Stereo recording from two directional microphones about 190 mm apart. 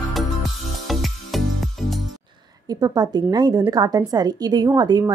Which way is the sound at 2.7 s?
20° right (ahead or behind).